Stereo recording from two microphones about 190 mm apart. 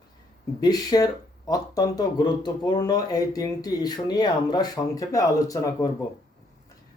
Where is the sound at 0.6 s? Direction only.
20° left (ahead or behind).